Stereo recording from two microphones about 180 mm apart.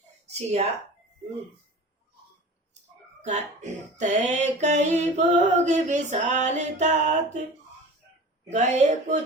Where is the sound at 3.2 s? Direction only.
40° right (ahead or behind).